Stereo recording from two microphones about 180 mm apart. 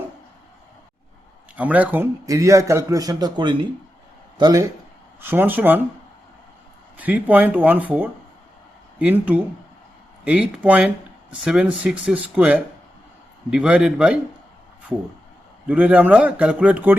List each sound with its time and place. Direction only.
1.5 s a man's voice: 10° right (ahead or behind); by 4.6 s 25° right (ahead or behind)
5.2 s speech: 10° right (ahead or behind)
6.9 s a man's voice: 10° right (ahead or behind)
15.6 s speech: 5° right (ahead or behind)